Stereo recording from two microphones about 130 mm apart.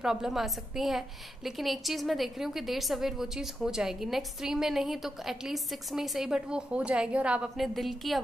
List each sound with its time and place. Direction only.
0.0 s a woman's voice: 5° right (ahead or behind)